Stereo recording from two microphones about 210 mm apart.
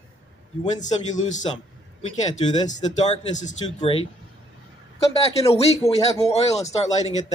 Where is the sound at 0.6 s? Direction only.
35° left (ahead or behind).